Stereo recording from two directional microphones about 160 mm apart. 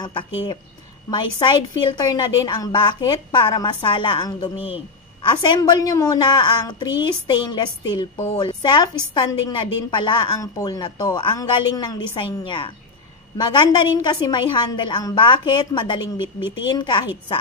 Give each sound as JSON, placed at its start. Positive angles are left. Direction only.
{"t": 0.0, "sound": "a woman's voice", "side_deg": 30}